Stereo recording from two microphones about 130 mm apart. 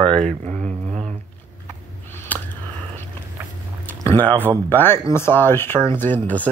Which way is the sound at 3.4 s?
15° right (ahead or behind).